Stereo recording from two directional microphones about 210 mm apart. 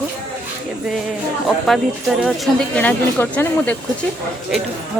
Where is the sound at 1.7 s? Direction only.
Centre (ahead or behind).